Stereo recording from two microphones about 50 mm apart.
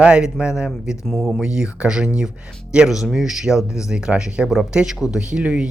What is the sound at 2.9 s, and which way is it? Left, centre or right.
Speech, centre.